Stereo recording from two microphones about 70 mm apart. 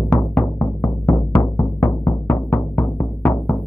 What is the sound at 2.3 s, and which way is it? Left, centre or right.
Music, left.